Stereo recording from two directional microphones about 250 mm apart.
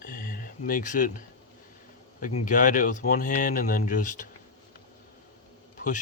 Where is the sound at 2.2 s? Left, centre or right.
Left.